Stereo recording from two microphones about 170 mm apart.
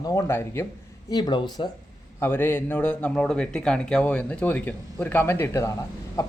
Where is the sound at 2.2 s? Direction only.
10° left (ahead or behind).